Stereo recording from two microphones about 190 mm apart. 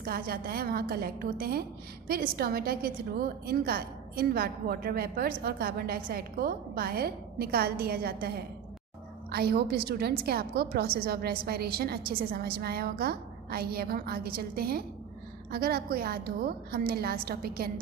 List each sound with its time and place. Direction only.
0.0 s a woman's voice: 50° right (ahead or behind)
9.3 s a woman's voice: 55° right (ahead or behind)